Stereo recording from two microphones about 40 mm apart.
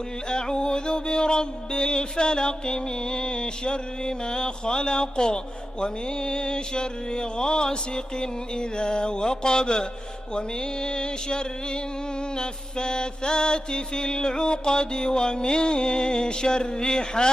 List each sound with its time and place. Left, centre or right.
0.3 s music: centre